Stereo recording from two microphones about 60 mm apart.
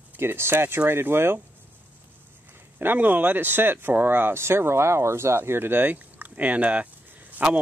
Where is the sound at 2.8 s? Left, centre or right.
Right.